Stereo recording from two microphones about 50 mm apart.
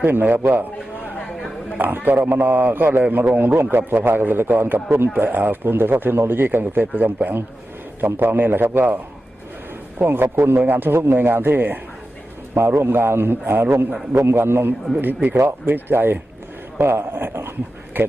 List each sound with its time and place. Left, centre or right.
0.0 s a man's voice: right
1.3 s a sound: centre
2.0 s a man's voice: right
10.3 s a man's voice: right
12.5 s a man's voice: right
15.0 s a man's voice: right